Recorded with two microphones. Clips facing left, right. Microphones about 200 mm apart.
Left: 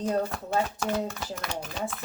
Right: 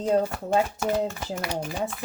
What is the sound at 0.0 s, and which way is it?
Speech, 10° right (ahead or behind).